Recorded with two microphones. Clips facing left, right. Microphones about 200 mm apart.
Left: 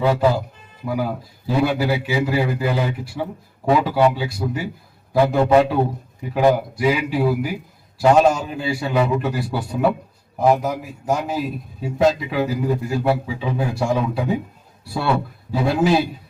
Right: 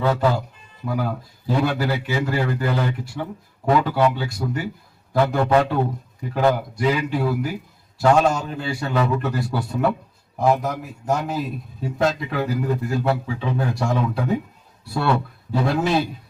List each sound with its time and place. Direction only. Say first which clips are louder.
0.0 s a man's voice: left 2 dB; 15° left (ahead or behind)
5.4 s a man's voice: left 4 dB; 20° left (ahead or behind)